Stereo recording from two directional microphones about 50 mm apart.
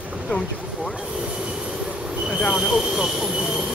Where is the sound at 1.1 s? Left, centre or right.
Centre.